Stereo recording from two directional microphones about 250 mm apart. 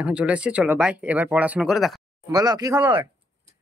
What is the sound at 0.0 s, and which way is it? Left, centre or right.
Speech, centre.